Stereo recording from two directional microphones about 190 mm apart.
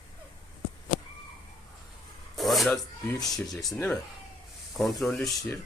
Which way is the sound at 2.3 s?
Centre (ahead or behind).